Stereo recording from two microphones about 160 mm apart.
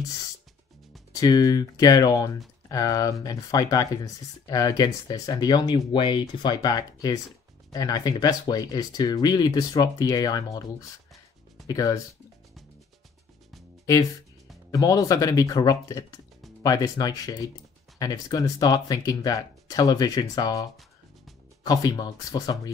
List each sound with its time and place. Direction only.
1.1 s speech: 25° left (ahead or behind)
11.6 s speech: 20° left (ahead or behind)
14.7 s speech: 20° left (ahead or behind)
21.6 s speech: 25° left (ahead or behind)